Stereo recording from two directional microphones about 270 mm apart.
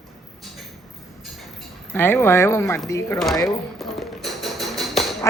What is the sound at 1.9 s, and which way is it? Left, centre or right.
A man's voice, centre.